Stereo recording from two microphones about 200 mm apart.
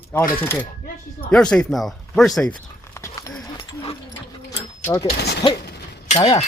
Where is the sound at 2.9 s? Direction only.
15° left (ahead or behind).